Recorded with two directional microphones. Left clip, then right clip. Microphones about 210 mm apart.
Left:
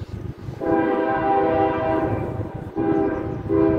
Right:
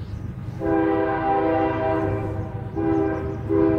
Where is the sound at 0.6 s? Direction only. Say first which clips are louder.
Left 1 dB; 35° left (ahead or behind).